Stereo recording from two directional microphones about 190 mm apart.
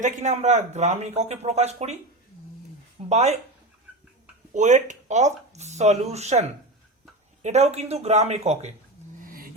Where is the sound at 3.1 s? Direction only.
35° right (ahead or behind).